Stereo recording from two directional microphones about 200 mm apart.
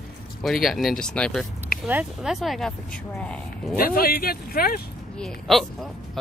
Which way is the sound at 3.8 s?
50° left (ahead or behind).